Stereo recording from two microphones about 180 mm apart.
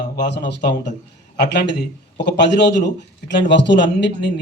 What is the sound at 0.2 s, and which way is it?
A man's voice, 70° left (ahead or behind).